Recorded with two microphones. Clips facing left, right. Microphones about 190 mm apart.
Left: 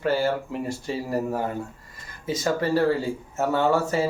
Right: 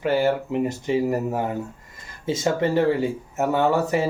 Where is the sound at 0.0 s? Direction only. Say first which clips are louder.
Right 3 dB; 15° right (ahead or behind).